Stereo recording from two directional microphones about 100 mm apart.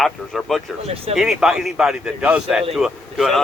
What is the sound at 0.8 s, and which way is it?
Speech, 80° right.